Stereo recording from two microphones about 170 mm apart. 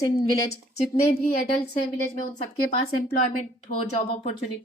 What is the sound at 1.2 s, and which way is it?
Speech, 40° left (ahead or behind).